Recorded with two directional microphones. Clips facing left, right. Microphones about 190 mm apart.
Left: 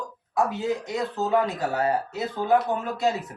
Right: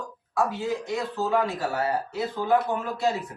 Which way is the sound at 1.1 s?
20° left (ahead or behind).